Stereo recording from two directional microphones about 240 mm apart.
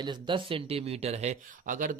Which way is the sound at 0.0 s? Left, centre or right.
Centre.